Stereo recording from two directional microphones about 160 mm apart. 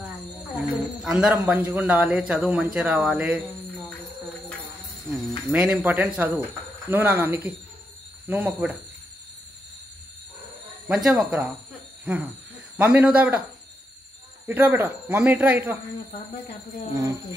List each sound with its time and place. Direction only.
1.0 s a man's voice: 5° right (ahead or behind)
5.1 s a man's voice: 5° right (ahead or behind)
10.9 s speech: 5° right (ahead or behind)
12.7 s a man's voice: 10° right (ahead or behind)
14.5 s a man's voice: 10° right (ahead or behind)
16.9 s speech: 20° right (ahead or behind)